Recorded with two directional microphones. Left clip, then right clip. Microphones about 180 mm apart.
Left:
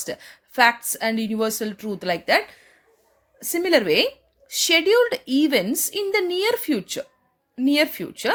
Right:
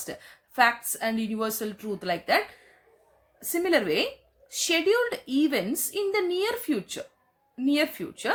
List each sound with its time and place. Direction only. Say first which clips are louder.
0.0 s a woman's voice: left 7 dB; 40° left (ahead or behind)